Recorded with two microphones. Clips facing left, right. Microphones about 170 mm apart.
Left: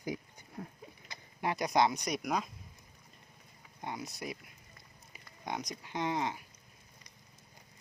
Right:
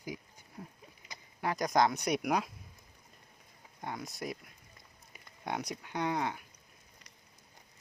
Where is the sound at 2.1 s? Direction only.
10° right (ahead or behind).